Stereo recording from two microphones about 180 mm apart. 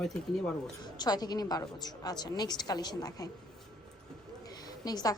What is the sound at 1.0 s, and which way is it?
A woman's voice, 20° left (ahead or behind).